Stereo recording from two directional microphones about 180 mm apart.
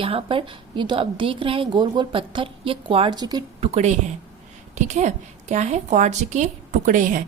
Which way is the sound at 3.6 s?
40° right (ahead or behind).